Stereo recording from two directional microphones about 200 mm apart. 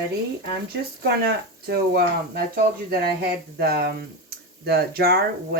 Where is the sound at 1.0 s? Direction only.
50° right (ahead or behind).